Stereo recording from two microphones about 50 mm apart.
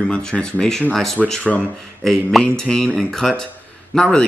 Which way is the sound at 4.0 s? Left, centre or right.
Centre.